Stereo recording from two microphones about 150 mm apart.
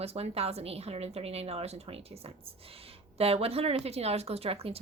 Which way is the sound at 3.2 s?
40° right (ahead or behind).